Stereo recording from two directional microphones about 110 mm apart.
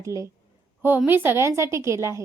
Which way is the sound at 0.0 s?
30° right (ahead or behind).